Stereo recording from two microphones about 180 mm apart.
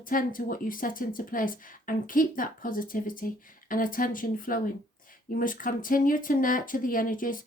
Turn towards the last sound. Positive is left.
turn(degrees=50)  # may be behind; listen again after turning